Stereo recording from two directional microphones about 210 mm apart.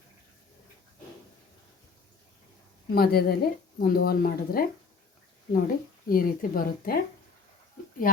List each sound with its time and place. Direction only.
2.9 s a woman's voice: 45° left (ahead or behind)